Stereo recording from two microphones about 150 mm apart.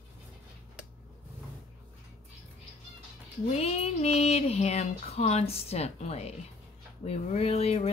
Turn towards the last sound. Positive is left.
turn(degrees=45)  # may be behind; listen again after turning